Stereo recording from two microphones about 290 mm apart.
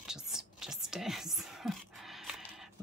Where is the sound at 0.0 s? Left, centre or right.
Centre.